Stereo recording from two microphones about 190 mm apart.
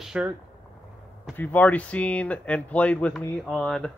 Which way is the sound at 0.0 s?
5° right (ahead or behind).